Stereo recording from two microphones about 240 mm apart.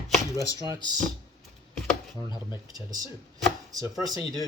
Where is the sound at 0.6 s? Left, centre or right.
Centre.